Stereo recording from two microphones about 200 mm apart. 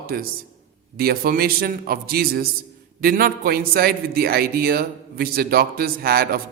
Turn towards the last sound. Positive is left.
turn(degrees=-50)  # may be behind; listen again after turning